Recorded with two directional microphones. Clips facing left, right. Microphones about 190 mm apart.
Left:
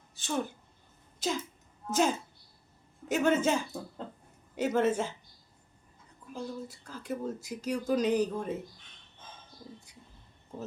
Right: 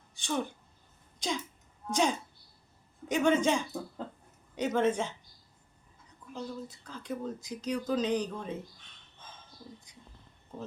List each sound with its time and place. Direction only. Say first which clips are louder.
0.1 s a woman's voice: even; 5° left (ahead or behind)
6.3 s speech: left 1 dB; 10° left (ahead or behind)
9.9 s whispering: left 1 dB; 10° left (ahead or behind)